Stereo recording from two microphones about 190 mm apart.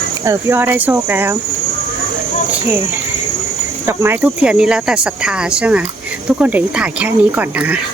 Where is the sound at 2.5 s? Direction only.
10° right (ahead or behind).